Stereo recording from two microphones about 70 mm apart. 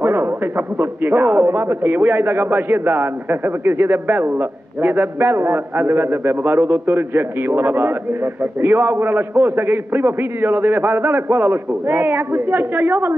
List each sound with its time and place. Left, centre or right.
0.0 s a man's voice: right